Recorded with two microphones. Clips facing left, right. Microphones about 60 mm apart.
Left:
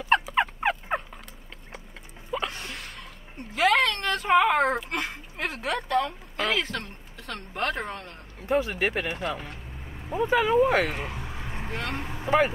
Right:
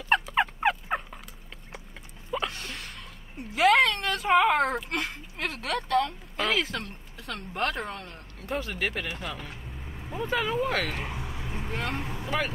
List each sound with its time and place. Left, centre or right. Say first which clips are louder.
0.1 s turkey: left 2 dB; centre
2.5 s a woman's voice: left 1 dB; centre
8.4 s speech: left 6 dB; centre
9.5 s vehicle: left 1 dB; centre
10.1 s speech: left 6 dB; centre
12.2 s speech: left 9 dB; left